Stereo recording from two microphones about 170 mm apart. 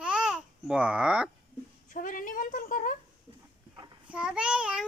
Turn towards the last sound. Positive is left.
turn(degrees=-5)  # may be behind; listen again after turning